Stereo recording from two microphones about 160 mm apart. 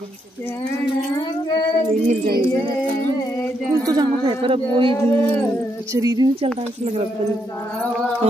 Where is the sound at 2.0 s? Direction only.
70° right (ahead or behind).